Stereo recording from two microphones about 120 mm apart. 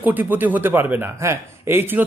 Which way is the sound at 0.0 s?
15° right (ahead or behind).